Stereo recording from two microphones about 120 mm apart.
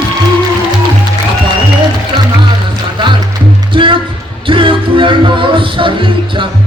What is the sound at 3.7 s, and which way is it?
Music, 45° right (ahead or behind).